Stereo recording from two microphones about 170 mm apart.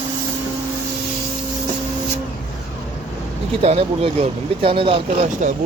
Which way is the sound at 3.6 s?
35° right (ahead or behind).